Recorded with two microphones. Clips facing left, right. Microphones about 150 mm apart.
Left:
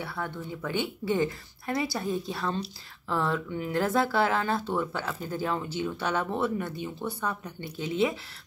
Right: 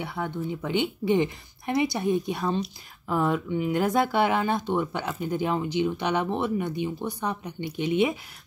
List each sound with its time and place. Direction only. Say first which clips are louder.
0.0 s a woman's voice: right 4 dB; 20° right (ahead or behind)